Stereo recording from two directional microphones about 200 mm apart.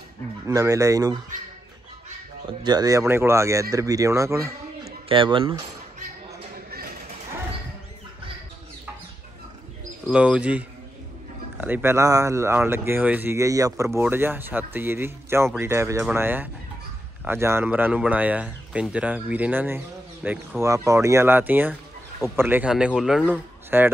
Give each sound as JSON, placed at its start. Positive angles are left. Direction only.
{"t": 0.5, "sound": "speech", "side_deg": -15}
{"t": 2.6, "sound": "speech", "side_deg": -20}
{"t": 5.0, "sound": "speech", "side_deg": -25}
{"t": 10.0, "sound": "speech", "side_deg": -5}
{"t": 11.6, "sound": "speech", "side_deg": -10}